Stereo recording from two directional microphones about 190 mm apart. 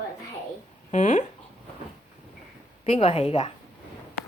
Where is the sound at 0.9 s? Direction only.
40° left (ahead or behind).